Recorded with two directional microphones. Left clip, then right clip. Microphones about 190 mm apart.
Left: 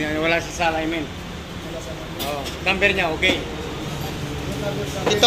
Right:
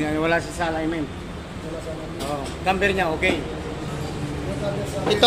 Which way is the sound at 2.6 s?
45° right (ahead or behind).